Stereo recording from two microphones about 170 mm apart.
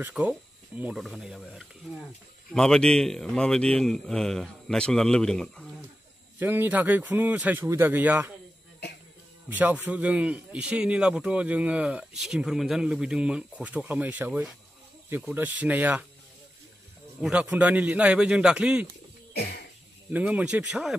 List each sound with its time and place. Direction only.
0.0 s a man's voice: 5° right (ahead or behind)
6.4 s a man's voice: 10° right (ahead or behind)
9.5 s a man's voice: 10° right (ahead or behind)
17.2 s a man's voice: 5° right (ahead or behind)
19.3 s cough: 70° left (ahead or behind)
20.1 s a man's voice: 10° right (ahead or behind)